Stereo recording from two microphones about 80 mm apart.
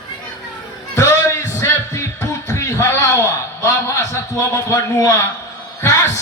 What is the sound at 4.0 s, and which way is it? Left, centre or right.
A man's voice, left.